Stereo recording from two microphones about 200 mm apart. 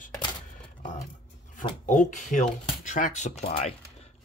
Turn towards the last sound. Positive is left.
turn(degrees=30)  # may be behind; listen again after turning